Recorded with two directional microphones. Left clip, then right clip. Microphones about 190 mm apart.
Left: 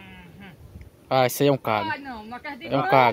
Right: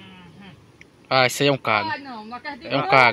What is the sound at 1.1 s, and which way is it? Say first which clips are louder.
Speech: right 2 dB; 20° left (ahead or behind).